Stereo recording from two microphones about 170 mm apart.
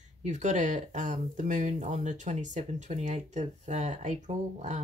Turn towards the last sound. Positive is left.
turn(degrees=-45)  # may be behind; listen again after turning